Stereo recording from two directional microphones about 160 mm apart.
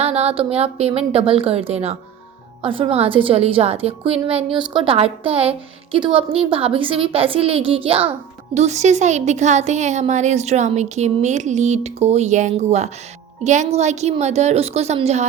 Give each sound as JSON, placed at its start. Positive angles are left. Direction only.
{"t": 0.0, "sound": "a woman's voice", "side_deg": -40}